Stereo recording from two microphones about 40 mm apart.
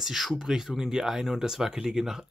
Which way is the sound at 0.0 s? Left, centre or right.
Centre.